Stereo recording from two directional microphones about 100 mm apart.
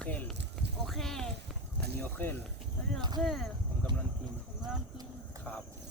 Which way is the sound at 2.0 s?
20° left (ahead or behind).